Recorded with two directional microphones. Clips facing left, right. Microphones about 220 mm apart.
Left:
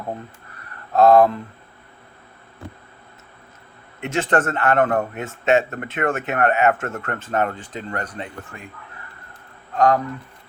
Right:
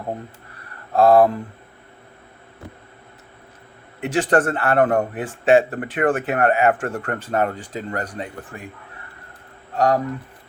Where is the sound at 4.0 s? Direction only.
35° right (ahead or behind).